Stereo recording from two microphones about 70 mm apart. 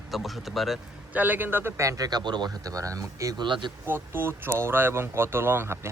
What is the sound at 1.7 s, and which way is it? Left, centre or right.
Speech, right.